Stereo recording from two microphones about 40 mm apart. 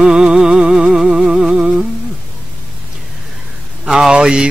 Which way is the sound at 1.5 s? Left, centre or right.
Right.